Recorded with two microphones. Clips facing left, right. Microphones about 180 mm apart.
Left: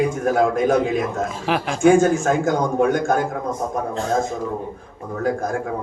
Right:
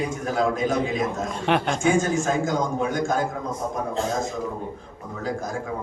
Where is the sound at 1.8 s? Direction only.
55° left (ahead or behind).